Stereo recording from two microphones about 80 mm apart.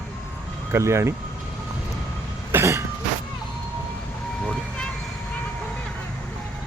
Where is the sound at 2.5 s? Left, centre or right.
Right.